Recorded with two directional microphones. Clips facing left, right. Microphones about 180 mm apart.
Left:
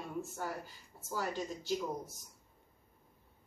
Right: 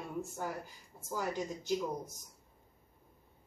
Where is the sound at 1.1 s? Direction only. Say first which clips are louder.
Right 1 dB; 15° right (ahead or behind).